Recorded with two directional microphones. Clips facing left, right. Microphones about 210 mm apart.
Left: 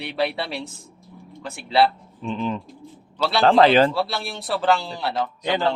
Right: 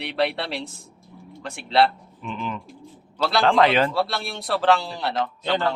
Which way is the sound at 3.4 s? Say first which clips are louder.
Left 4 dB; 30° left (ahead or behind).